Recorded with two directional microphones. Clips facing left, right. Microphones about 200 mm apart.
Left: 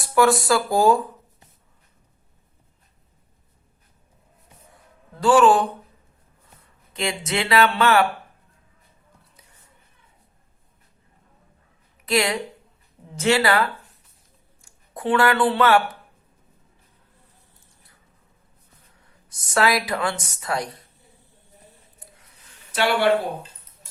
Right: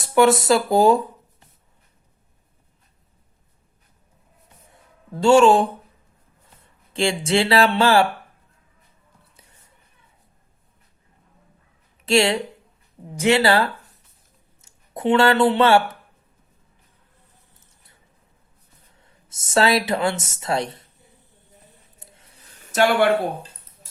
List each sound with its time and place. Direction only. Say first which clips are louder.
0.0 s speech: right 2 dB; 20° right (ahead or behind)
4.7 s a sound: right 11 dB; 25° right (ahead or behind)
6.9 s speech: right 6 dB; 30° right (ahead or behind)
12.0 s speech: right 4 dB; 25° right (ahead or behind)
19.3 s speech: right 2 dB; 25° right (ahead or behind)
21.9 s a sound: even; 25° right (ahead or behind)
22.6 s speech: right 4 dB; 45° right (ahead or behind)